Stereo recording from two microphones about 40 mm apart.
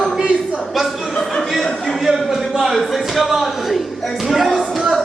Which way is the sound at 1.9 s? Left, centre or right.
Centre.